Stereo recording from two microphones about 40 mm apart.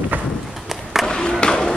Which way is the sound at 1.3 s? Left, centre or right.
Centre.